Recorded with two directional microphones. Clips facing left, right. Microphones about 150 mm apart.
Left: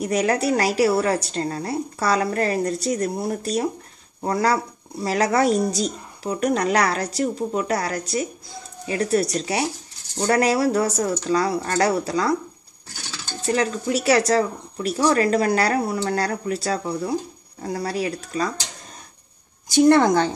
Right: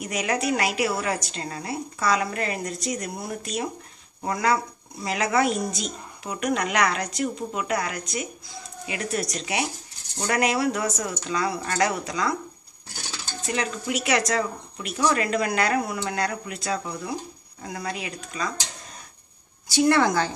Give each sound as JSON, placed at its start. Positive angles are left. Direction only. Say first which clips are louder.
{"t": 0.0, "sound": "speech", "louder": "left 5 dB", "side_deg": 35}
{"t": 13.5, "sound": "speech", "louder": "left 6 dB", "side_deg": 35}
{"t": 19.9, "sound": "speech", "louder": "left 5 dB", "side_deg": 45}